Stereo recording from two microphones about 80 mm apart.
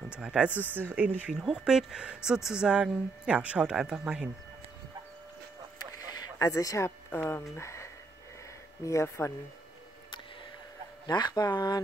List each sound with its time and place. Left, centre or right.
0.1 s speech: centre
1.4 s speech: centre
6.3 s speech: left
7.1 s speech: left
7.5 s a sound: left
8.8 s speech: left
11.1 s speech: left